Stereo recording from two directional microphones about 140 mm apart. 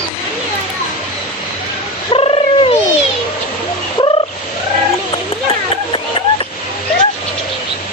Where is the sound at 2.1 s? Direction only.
40° left (ahead or behind).